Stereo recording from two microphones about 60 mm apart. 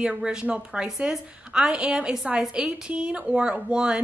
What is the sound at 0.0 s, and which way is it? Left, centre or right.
A woman's voice, centre.